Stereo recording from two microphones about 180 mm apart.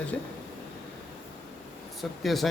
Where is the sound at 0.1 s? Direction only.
10° left (ahead or behind).